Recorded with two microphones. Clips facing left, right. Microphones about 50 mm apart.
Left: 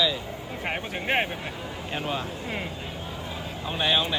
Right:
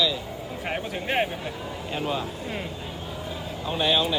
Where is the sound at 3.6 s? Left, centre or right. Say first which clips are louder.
Right 2 dB; centre.